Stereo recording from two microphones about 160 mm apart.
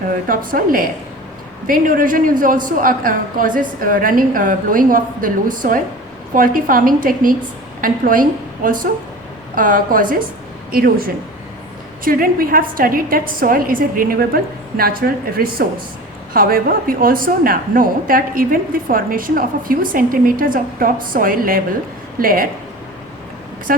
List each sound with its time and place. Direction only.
0.3 s a woman's voice: 60° right (ahead or behind)
10.7 s a woman's voice: 70° right (ahead or behind)